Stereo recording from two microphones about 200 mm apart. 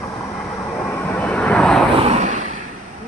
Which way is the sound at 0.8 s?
10° left (ahead or behind).